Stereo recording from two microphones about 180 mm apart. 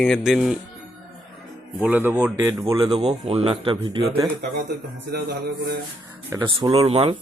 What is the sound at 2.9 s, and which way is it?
Speech, 35° right (ahead or behind).